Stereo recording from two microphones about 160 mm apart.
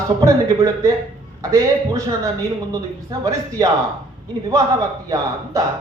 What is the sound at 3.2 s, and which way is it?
Speech, 20° right (ahead or behind).